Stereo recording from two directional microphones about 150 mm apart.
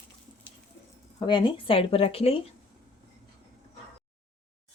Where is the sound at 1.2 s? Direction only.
30° left (ahead or behind).